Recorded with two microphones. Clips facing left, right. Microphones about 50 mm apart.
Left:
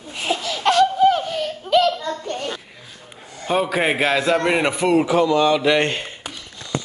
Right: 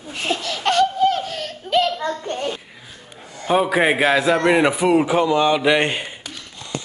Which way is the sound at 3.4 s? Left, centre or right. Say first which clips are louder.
Right 3 dB; centre.